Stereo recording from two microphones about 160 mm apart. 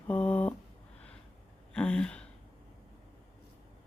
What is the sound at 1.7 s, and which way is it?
Gasp, 5° left (ahead or behind).